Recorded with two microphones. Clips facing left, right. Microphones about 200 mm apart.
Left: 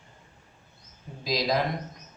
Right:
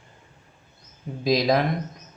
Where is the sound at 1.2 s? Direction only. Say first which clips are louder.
Right 6 dB; 55° right (ahead or behind).